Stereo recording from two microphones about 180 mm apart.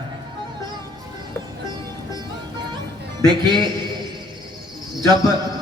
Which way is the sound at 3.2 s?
25° right (ahead or behind).